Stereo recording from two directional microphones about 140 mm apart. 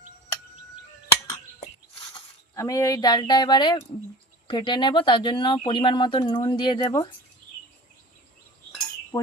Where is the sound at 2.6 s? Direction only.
25° left (ahead or behind).